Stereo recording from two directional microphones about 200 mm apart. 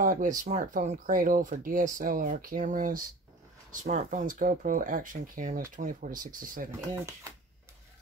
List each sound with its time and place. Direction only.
0.0 s speech: 40° right (ahead or behind)